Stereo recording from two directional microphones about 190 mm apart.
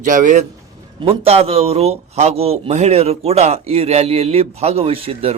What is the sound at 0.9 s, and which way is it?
Speech, 30° right (ahead or behind).